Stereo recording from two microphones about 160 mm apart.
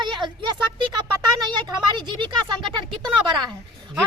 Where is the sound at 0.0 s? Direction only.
30° right (ahead or behind).